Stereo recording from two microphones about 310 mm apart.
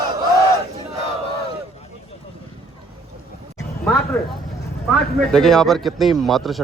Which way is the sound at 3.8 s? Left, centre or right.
Centre.